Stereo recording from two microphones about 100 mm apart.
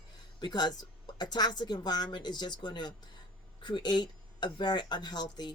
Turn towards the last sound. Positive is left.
turn(degrees=45)  # may be behind; listen again after turning